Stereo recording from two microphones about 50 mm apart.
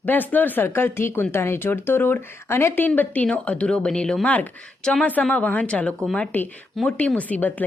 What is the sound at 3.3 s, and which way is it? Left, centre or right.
Speech, left.